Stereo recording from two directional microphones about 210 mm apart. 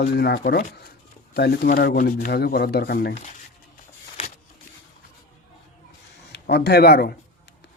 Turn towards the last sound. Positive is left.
turn(degrees=50)  # may be behind; listen again after turning